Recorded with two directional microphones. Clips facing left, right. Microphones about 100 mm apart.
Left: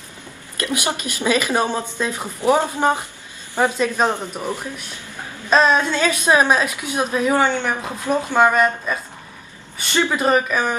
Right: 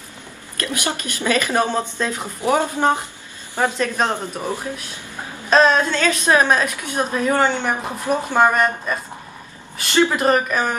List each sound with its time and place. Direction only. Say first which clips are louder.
0.6 s a woman's voice: left 1 dB; 20° left (ahead or behind)
4.1 s speech: even; 15° right (ahead or behind)
5.5 s a woman's voice: right 1 dB; 10° left (ahead or behind)
7.4 s speech: even; 10° right (ahead or behind)
10.1 s speech: even; centre (ahead or behind)